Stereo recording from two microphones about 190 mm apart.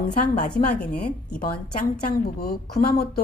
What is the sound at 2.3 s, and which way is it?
Speech, 55° left (ahead or behind).